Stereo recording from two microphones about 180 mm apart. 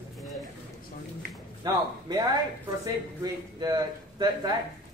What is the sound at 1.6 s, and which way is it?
A man's voice, 25° right (ahead or behind).